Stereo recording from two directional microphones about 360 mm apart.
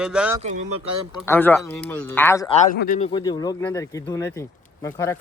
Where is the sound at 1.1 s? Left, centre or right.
Centre.